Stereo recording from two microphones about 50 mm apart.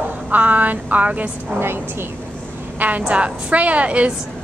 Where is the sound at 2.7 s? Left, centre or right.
Right.